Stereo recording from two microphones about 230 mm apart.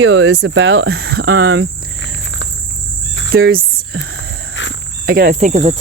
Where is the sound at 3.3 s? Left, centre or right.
Right.